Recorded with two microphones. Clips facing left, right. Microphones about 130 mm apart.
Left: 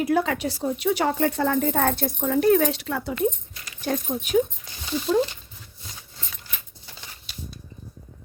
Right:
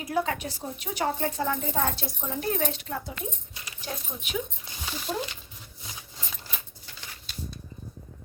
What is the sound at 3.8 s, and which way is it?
Speech, 45° left (ahead or behind).